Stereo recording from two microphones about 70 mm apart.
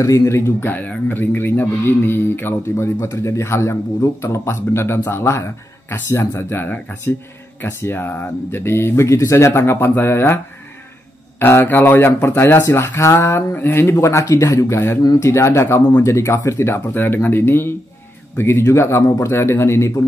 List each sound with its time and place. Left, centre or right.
0.0 s speech: left